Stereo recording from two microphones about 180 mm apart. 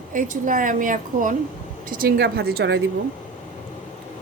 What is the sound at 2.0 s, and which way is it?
Speech, 60° right (ahead or behind).